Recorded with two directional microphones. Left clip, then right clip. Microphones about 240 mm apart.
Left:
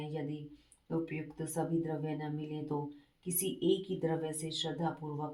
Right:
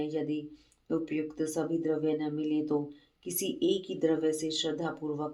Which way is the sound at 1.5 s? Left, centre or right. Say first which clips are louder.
Right 3 dB; right.